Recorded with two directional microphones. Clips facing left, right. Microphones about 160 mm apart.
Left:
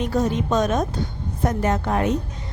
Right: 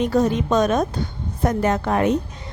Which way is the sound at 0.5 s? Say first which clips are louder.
Right 2 dB; 65° right (ahead or behind).